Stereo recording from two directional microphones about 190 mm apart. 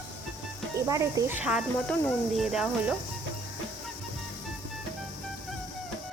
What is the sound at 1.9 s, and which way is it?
Speech, 5° left (ahead or behind).